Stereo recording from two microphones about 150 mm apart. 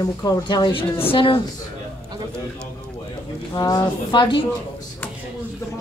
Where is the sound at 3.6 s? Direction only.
25° left (ahead or behind).